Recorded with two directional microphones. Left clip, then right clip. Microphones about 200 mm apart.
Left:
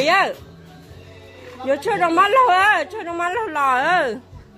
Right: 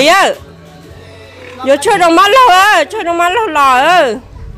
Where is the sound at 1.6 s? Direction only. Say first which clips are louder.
Right 10 dB; 20° right (ahead or behind).